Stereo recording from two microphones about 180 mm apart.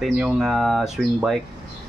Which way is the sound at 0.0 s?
5° right (ahead or behind).